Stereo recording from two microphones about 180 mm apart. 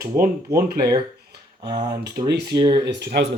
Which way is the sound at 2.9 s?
65° right (ahead or behind).